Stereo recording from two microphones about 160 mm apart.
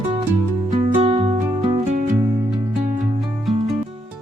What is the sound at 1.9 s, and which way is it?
Music, 50° right (ahead or behind).